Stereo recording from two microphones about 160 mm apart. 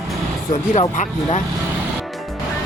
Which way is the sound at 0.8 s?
40° left (ahead or behind).